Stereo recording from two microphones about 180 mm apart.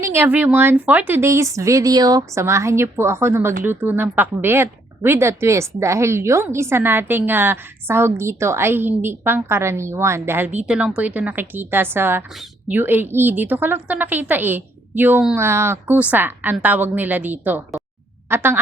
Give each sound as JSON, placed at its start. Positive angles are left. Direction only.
{"t": 0.0, "sound": "speech", "side_deg": -10}